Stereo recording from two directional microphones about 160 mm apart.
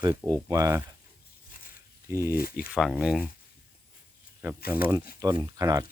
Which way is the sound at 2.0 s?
15° right (ahead or behind).